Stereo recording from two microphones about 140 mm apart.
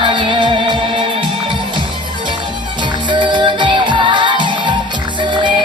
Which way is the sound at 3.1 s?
35° right (ahead or behind).